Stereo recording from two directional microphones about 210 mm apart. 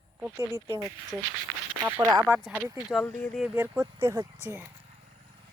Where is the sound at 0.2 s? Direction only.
10° right (ahead or behind).